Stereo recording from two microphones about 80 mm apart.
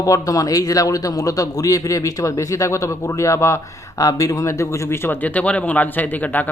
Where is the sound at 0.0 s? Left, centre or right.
Left.